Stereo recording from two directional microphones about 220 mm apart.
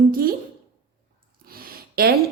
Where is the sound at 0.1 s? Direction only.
40° right (ahead or behind).